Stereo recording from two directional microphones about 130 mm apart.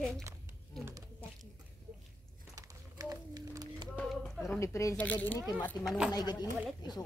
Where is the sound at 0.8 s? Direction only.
20° right (ahead or behind).